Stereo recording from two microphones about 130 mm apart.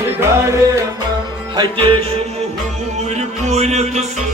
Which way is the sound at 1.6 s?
45° right (ahead or behind).